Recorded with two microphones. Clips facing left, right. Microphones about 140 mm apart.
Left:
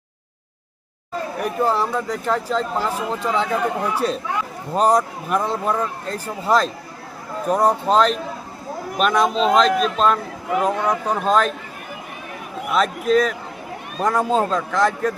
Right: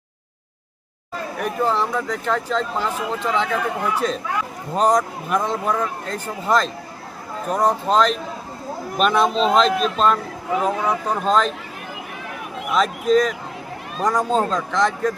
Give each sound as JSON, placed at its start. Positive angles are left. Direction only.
{"t": 1.4, "sound": "speech", "side_deg": 10}
{"t": 6.1, "sound": "speech", "side_deg": 35}
{"t": 7.4, "sound": "speech", "side_deg": 10}
{"t": 12.7, "sound": "speech", "side_deg": 0}